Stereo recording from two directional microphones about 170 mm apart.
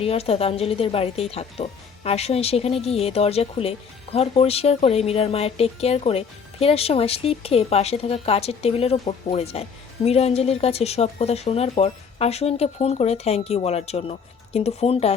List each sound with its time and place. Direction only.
0.0 s speech: 35° left (ahead or behind)